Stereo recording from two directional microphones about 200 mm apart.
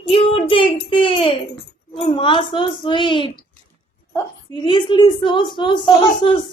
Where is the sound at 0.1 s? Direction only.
25° left (ahead or behind).